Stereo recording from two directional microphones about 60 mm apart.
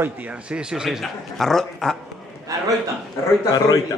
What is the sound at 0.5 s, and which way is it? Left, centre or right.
Mantra, centre.